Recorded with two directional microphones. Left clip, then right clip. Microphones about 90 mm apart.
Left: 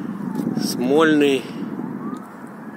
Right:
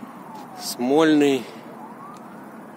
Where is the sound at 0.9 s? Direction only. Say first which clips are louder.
Left 2 dB; 25° right (ahead or behind).